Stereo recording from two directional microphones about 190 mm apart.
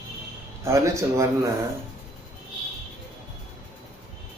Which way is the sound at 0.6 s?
15° right (ahead or behind).